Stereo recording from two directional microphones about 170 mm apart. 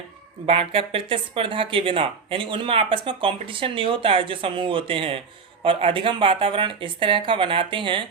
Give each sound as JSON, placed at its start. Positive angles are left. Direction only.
{"t": 0.4, "sound": "speech", "side_deg": -35}